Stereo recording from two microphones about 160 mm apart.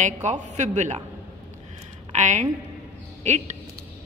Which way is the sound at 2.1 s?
50° right (ahead or behind).